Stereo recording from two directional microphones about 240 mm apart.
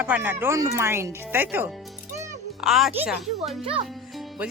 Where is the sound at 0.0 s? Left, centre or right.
Centre.